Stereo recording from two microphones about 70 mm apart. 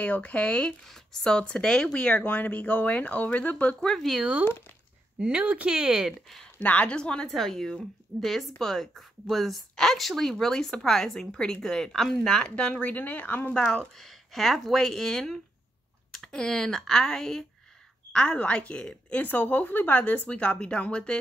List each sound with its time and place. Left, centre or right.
0.0 s speech: left
2.2 s speech: left
3.9 s speech: centre
5.2 s speech: right
6.6 s speech: centre
7.2 s speech: centre; by 13.5 s left
13.5 s speech: centre
19.2 s speech: left